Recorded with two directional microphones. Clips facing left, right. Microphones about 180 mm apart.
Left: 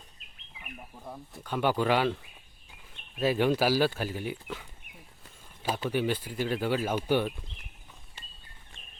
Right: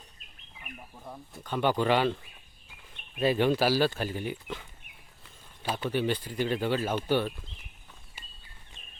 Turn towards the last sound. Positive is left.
turn(degrees=10)  # may be behind; listen again after turning